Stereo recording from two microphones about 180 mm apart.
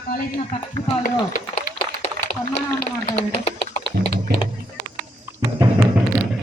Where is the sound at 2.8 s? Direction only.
40° left (ahead or behind).